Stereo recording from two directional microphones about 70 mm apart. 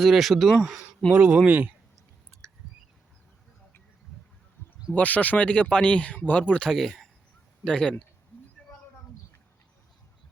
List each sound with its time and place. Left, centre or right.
0.0 s speech: centre
1.1 s speech: centre
4.9 s speech: left